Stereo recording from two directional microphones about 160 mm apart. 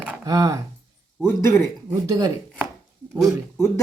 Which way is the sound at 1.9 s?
20° right (ahead or behind).